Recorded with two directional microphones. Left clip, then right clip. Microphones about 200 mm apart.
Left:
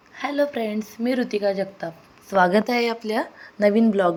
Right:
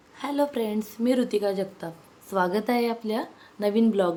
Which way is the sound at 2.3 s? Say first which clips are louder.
Left 6 dB; 20° left (ahead or behind).